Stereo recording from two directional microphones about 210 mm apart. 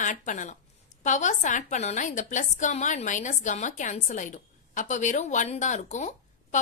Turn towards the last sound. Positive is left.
turn(degrees=35)  # may be behind; listen again after turning